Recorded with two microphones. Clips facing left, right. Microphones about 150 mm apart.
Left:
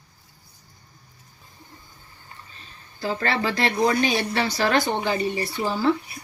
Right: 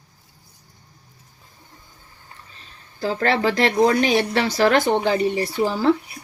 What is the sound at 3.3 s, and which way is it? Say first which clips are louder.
Speech: right 6 dB; 90° right.